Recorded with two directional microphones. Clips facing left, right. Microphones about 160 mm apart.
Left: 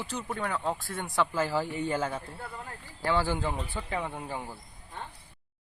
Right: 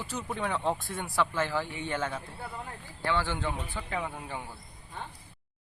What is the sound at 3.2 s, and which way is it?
Speech, 10° left (ahead or behind).